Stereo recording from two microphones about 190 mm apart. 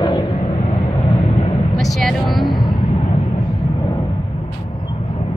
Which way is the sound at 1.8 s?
Centre (ahead or behind).